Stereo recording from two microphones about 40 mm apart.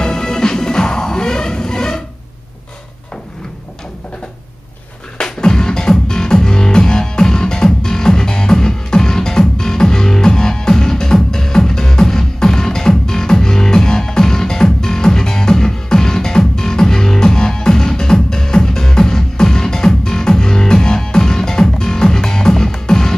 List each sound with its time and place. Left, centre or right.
0.0 s music: centre
5.2 s music: centre